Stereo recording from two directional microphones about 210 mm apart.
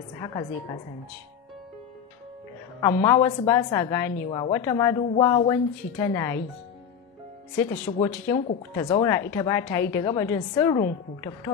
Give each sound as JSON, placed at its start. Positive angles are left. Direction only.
{"t": 0.2, "sound": "a woman's voice", "side_deg": 20}
{"t": 2.8, "sound": "a woman's voice", "side_deg": 15}
{"t": 7.9, "sound": "a woman's voice", "side_deg": 25}